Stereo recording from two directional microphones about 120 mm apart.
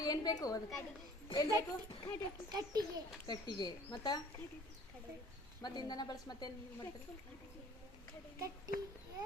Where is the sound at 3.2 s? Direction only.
40° left (ahead or behind).